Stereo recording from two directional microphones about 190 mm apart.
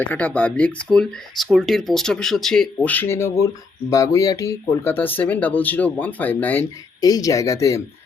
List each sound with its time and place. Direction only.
0.0 s speech: 10° left (ahead or behind)